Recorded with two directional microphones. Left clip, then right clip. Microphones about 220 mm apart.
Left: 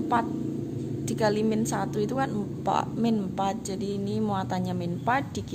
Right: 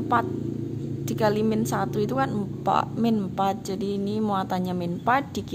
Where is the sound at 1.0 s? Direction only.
20° right (ahead or behind).